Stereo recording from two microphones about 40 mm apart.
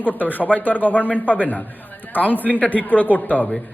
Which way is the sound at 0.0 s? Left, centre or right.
Left.